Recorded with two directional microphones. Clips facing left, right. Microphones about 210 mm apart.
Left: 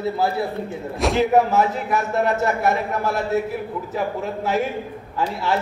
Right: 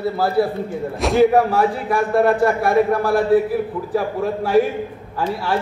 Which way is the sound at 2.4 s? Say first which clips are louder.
Right 5 dB; 25° left (ahead or behind).